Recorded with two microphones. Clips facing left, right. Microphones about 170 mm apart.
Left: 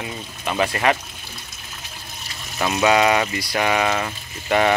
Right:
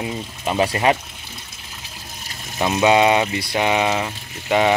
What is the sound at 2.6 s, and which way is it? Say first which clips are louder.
Speech: right 2 dB; 20° right (ahead or behind).